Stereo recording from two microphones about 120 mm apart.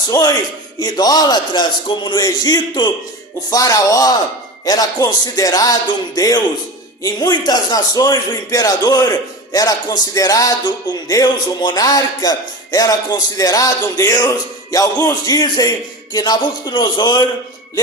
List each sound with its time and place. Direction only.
0.1 s a man's voice: 30° left (ahead or behind)